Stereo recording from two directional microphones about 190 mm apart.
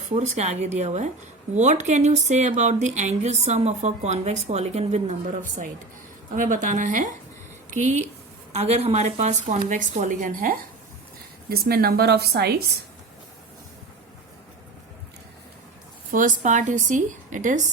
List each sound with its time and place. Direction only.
0.1 s speech: 35° right (ahead or behind)
6.3 s a woman's voice: 45° right (ahead or behind)
16.1 s speech: 45° right (ahead or behind)